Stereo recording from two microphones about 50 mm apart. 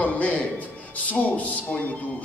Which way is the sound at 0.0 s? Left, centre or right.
Left.